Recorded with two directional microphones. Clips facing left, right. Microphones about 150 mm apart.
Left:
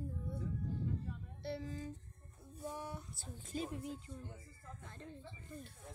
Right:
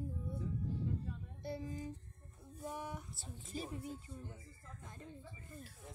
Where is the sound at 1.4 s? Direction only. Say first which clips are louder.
Even; 20° right (ahead or behind).